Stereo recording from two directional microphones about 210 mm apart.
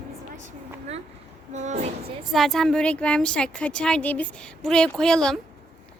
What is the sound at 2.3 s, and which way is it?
A woman's voice, centre (ahead or behind).